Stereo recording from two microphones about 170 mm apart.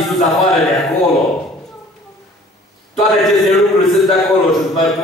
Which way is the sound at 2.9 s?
Centre (ahead or behind).